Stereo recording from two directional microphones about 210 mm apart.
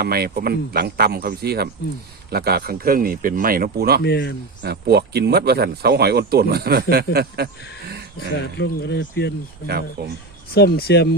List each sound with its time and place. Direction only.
0.0 s speech: 45° right (ahead or behind)
4.0 s speech: 50° left (ahead or behind)
4.6 s speech: 50° right (ahead or behind)
8.5 s speech: 55° left (ahead or behind)
9.6 s speech: 50° right (ahead or behind)
10.5 s speech: 50° left (ahead or behind)